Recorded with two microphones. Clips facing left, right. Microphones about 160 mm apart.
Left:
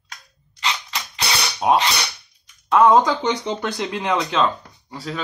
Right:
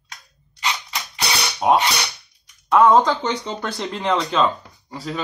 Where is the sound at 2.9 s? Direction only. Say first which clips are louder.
Even; 15° left (ahead or behind); by 5.2 s centre (ahead or behind).